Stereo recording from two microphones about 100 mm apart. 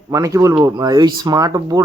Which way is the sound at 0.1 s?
35° right (ahead or behind).